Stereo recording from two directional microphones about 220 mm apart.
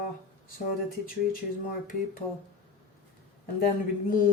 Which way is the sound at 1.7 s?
40° left (ahead or behind).